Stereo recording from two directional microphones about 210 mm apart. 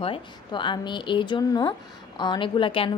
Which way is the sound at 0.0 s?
25° left (ahead or behind).